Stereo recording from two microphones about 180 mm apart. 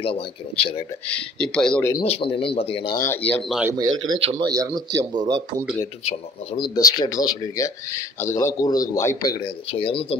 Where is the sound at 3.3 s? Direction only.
Centre (ahead or behind).